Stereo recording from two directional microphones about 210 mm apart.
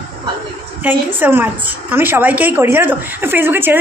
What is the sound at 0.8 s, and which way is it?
A woman's voice, 10° right (ahead or behind).